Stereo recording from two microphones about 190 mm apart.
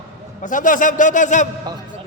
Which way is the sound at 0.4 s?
45° left (ahead or behind).